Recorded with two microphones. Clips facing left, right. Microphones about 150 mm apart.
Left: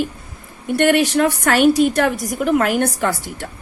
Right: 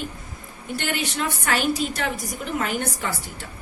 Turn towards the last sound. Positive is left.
turn(degrees=75)  # may be behind; listen again after turning